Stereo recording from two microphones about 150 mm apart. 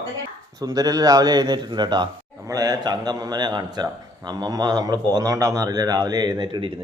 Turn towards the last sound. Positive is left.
turn(degrees=-30)  # may be behind; listen again after turning